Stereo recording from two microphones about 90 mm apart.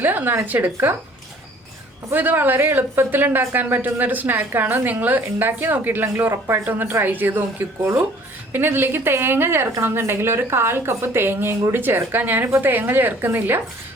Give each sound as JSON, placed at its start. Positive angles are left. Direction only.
{"t": 0.0, "sound": "speech", "side_deg": -20}
{"t": 2.0, "sound": "speech", "side_deg": -20}